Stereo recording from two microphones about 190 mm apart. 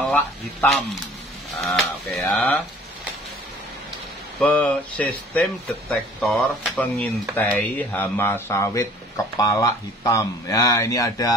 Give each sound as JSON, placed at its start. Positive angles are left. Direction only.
{"t": 0.0, "sound": "speech", "side_deg": 5}
{"t": 4.4, "sound": "speech", "side_deg": 5}